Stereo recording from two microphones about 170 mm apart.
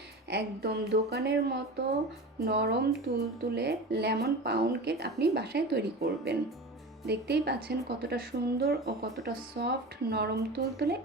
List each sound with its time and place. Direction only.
0.3 s speech: 70° right (ahead or behind)
2.4 s speech: 65° right (ahead or behind)
3.5 s speech: 75° right (ahead or behind)